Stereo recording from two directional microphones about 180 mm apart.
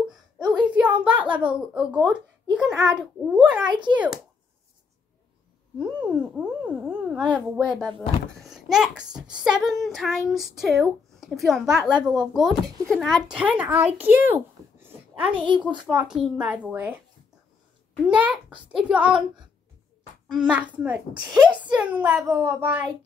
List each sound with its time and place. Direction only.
0.1 s a sound: 5° right (ahead or behind)
1.2 s a child's voice: 10° right (ahead or behind)
3.6 s a child's voice: 25° right (ahead or behind)
5.8 s a child's voice: 5° right (ahead or behind)
18.0 s a child's voice: 5° right (ahead or behind)
18.5 s a child's voice: 30° right (ahead or behind)
18.8 s a child's voice: 5° right (ahead or behind)
20.4 s a child's voice: 5° right (ahead or behind)